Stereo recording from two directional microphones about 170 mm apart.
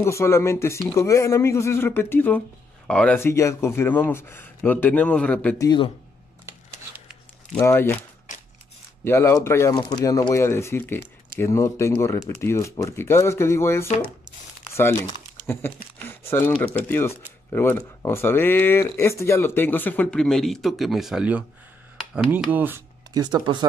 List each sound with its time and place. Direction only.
0.0 s speech: 15° left (ahead or behind)
7.5 s speech: 10° left (ahead or behind)
9.0 s speech: 15° left (ahead or behind)
14.7 s crumpling: 15° left (ahead or behind)
16.0 s speech: 15° left (ahead or behind); by 23.6 s 25° right (ahead or behind)